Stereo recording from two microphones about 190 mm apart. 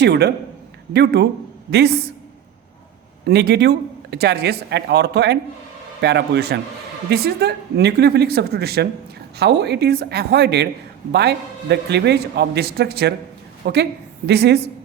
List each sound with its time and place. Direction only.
0.0 s speech: 60° right (ahead or behind)
3.2 s speech: 60° right (ahead or behind)